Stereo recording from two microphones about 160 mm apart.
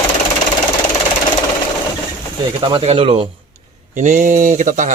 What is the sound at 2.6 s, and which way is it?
Speech, 30° right (ahead or behind).